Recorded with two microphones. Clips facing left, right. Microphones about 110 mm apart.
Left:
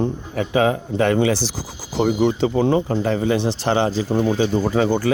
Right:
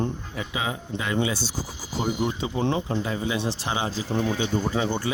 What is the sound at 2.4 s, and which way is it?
Speech, 90° left.